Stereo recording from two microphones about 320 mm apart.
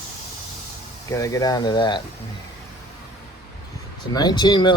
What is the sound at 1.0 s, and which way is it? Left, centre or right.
Speech, centre.